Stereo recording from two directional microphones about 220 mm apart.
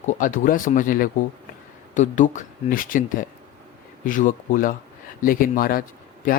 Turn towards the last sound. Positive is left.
turn(degrees=40)  # may be behind; listen again after turning